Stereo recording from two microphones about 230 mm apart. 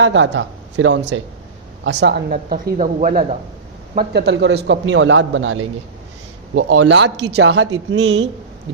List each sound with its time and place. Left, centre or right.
0.0 s a man's voice: right
3.9 s a man's voice: right
7.3 s speech: right
7.9 s a man's voice: right